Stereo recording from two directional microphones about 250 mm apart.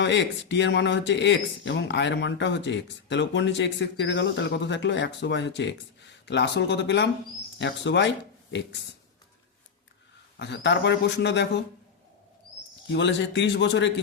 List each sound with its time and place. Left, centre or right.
0.0 s speech: left
10.3 s speech: left
12.9 s speech: left